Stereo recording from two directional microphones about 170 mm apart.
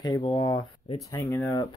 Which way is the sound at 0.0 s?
25° left (ahead or behind).